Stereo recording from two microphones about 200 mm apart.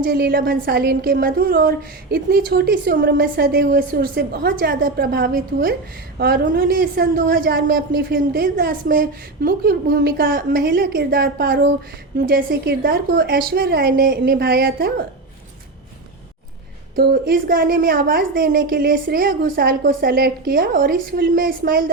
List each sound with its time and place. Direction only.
0.0 s a woman's voice: 50° right (ahead or behind)
16.9 s a woman's voice: 50° right (ahead or behind)